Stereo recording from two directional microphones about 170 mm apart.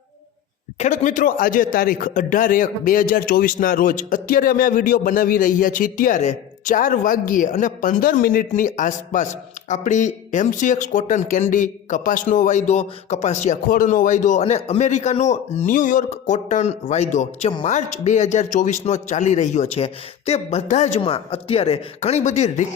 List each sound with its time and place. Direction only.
0.8 s speech: 45° left (ahead or behind)